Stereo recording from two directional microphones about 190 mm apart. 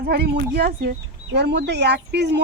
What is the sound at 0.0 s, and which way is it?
Speech, 60° right (ahead or behind).